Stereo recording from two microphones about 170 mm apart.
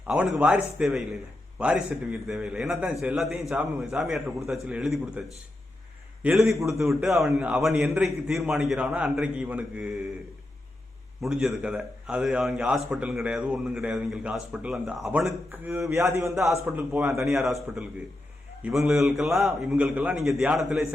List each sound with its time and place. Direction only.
0.1 s a man's voice: 5° right (ahead or behind)
6.2 s a man's voice: centre (ahead or behind)
11.2 s a man's voice: centre (ahead or behind)
15.3 s a man's voice: 15° right (ahead or behind)